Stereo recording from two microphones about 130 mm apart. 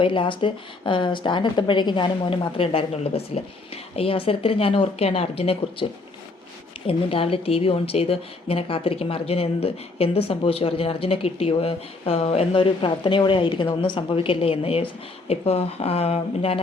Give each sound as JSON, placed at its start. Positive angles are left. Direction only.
{"t": 0.0, "sound": "a woman's voice", "side_deg": 40}